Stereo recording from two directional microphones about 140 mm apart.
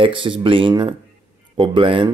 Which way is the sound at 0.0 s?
35° right (ahead or behind).